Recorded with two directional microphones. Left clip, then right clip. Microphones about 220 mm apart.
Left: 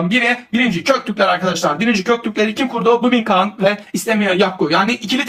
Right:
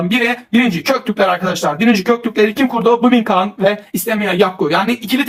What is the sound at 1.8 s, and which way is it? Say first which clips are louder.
Speech: right 2 dB; 20° right (ahead or behind).